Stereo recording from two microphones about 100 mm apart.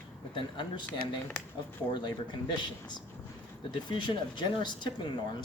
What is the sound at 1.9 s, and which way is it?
Speech, 50° left (ahead or behind).